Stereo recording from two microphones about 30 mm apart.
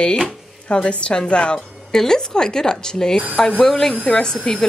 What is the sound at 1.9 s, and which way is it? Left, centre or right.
A woman's voice, centre.